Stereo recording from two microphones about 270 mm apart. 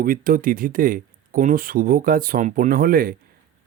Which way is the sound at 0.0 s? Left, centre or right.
Right.